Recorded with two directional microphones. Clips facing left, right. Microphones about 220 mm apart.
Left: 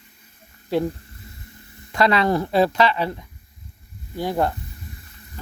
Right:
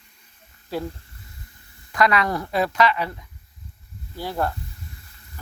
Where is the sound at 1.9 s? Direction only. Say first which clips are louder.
Left 3 dB; 30° left (ahead or behind).